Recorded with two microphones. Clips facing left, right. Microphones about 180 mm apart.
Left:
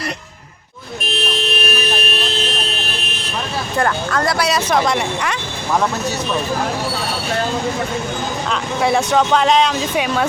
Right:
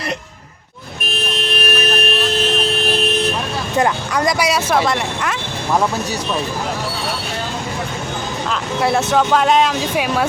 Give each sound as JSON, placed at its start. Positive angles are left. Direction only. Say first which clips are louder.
{"t": 1.8, "sound": "vehicle", "louder": "right 3 dB", "side_deg": -55}
{"t": 3.8, "sound": "speech", "louder": "right 1 dB", "side_deg": -15}
{"t": 8.8, "sound": "speech", "louder": "even", "side_deg": -5}